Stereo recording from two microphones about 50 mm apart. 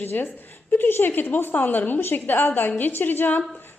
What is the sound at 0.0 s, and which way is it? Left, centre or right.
A woman's voice, left.